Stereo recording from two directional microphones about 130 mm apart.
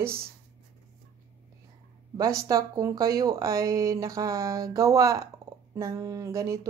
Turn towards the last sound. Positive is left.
turn(degrees=-25)  # may be behind; listen again after turning